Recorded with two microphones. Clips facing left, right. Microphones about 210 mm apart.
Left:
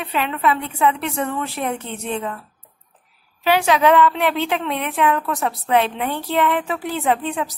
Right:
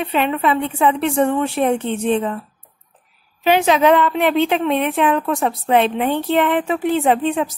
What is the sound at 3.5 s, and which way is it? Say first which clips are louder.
A woman's voice: right 2 dB; 20° right (ahead or behind).